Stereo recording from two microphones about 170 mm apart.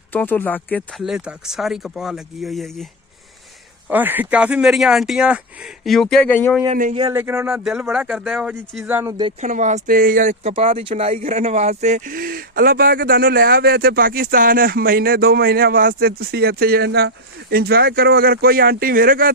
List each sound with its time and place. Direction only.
0.1 s speech: 10° left (ahead or behind)
3.8 s speech: 10° right (ahead or behind); by 6.6 s 10° left (ahead or behind)
7.1 s speech: 15° right (ahead or behind)
8.8 s speech: 15° right (ahead or behind)
9.4 s speech: 45° right (ahead or behind)
10.4 s speech: 35° right (ahead or behind); by 19.3 s 60° right (ahead or behind)